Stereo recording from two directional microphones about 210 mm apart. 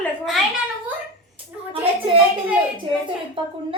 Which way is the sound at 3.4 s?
25° right (ahead or behind).